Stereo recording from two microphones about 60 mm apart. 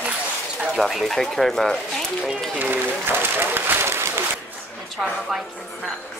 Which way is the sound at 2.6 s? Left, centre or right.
Right.